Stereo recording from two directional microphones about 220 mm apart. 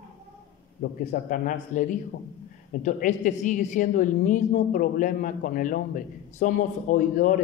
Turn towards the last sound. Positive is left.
turn(degrees=35)  # may be behind; listen again after turning